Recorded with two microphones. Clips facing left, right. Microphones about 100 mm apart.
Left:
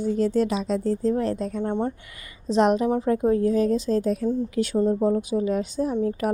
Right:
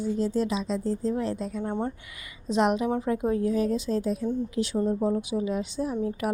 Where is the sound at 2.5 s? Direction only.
35° left (ahead or behind).